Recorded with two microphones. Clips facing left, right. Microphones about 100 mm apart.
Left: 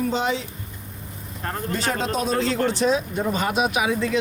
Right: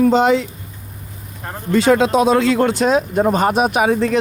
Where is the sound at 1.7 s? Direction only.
90° right; by 3.9 s 45° right (ahead or behind).